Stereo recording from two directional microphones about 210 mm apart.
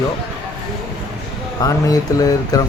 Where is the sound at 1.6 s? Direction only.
15° left (ahead or behind).